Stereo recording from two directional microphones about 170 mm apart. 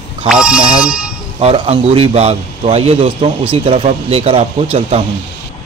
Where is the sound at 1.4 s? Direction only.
35° right (ahead or behind).